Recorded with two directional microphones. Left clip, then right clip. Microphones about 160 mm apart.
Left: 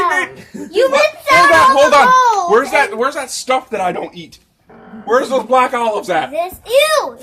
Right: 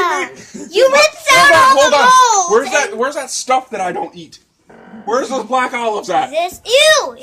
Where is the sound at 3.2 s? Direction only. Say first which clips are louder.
Right 1 dB; 5° right (ahead or behind).